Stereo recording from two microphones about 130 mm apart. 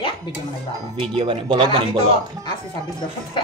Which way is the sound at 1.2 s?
40° right (ahead or behind).